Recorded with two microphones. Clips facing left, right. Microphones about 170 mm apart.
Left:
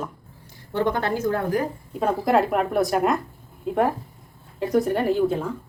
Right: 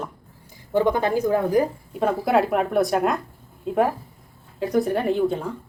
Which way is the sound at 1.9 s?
5° right (ahead or behind).